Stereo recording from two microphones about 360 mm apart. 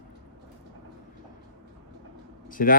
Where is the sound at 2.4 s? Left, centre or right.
Left.